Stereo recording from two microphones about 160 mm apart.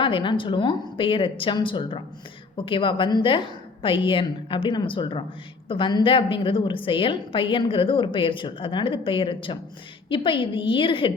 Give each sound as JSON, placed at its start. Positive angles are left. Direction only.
{"t": 0.0, "sound": "a woman's voice", "side_deg": 30}